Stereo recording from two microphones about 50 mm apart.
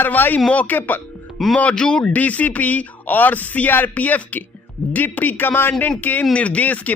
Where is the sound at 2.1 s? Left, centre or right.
Left.